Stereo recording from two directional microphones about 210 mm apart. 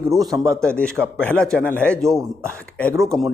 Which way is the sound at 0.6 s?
5° left (ahead or behind).